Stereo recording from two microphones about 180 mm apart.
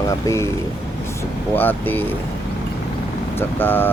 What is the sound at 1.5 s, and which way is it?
Speech, 10° left (ahead or behind).